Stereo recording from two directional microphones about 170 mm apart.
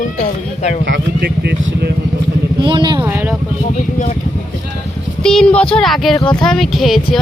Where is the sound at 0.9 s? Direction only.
75° right (ahead or behind).